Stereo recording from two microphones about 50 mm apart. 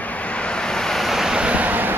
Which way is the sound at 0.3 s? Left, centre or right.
Left.